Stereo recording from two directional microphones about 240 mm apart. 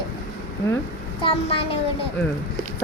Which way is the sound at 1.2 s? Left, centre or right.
Left.